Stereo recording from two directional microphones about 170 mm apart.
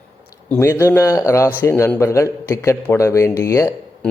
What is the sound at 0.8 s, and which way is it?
A man's voice, 15° left (ahead or behind).